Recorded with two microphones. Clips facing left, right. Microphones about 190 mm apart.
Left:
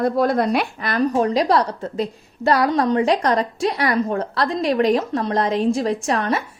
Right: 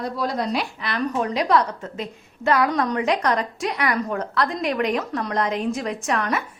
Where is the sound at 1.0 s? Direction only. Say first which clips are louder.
Left 6 dB; 35° left (ahead or behind).